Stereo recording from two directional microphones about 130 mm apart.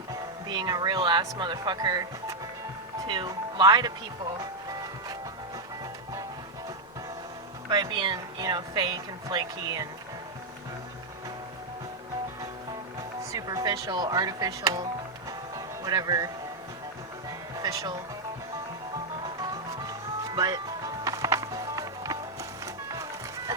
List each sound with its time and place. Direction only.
0.1 s speech: 35° right (ahead or behind)
7.7 s speech: 35° right (ahead or behind)
13.3 s speech: 25° right (ahead or behind)
15.3 s music: 25° right (ahead or behind)
17.6 s music: 30° right (ahead or behind)
19.9 s music: 30° right (ahead or behind)